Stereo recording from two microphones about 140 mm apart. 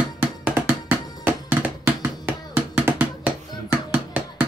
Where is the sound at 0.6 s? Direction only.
15° right (ahead or behind).